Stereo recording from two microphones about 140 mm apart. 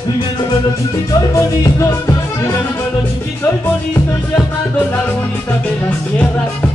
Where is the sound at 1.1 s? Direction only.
20° left (ahead or behind).